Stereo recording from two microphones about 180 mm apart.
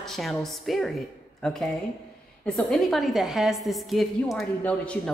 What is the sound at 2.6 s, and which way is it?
A woman's voice, centre (ahead or behind).